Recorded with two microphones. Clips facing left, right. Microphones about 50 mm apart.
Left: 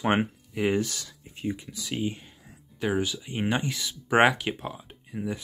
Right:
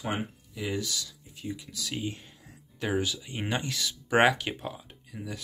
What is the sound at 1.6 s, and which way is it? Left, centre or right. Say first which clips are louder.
Speech: left 4 dB; centre.